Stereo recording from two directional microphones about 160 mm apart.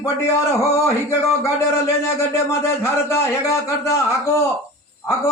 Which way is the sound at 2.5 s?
15° left (ahead or behind).